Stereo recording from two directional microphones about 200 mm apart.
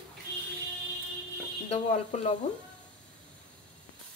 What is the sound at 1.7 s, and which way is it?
Speech, 35° left (ahead or behind).